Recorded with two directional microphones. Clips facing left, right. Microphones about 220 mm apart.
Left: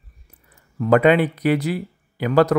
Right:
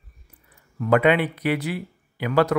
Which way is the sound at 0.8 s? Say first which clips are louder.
Left 4 dB; 40° left (ahead or behind).